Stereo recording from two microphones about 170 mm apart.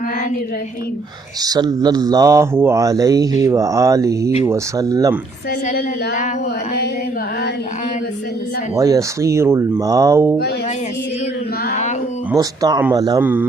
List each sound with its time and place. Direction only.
1.4 s speech: 25° right (ahead or behind)
8.7 s speech: 20° right (ahead or behind)
11.7 s a sound: 45° left (ahead or behind)
12.3 s speech: 20° right (ahead or behind)